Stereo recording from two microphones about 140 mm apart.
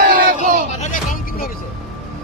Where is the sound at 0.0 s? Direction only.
75° right (ahead or behind).